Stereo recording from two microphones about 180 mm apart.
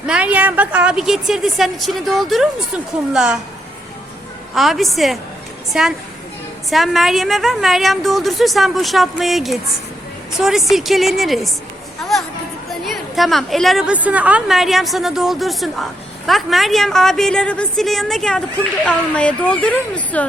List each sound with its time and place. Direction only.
0.1 s a woman's voice: 10° right (ahead or behind)
4.5 s a woman's voice: centre (ahead or behind)
12.8 s a woman's voice: centre (ahead or behind)